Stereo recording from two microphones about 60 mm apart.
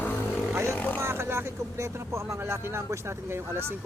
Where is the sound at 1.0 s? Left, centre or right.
Right.